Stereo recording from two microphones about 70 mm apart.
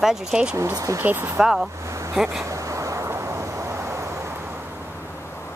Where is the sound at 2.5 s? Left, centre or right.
Right.